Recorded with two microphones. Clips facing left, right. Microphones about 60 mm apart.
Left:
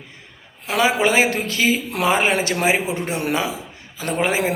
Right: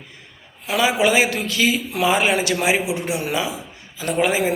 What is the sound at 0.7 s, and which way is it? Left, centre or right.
A man's voice, left.